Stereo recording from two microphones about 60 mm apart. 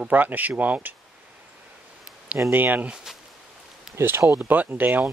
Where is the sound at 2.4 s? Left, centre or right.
Right.